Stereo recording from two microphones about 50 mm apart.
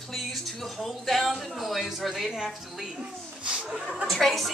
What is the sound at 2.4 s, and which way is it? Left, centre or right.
A woman's voice, centre.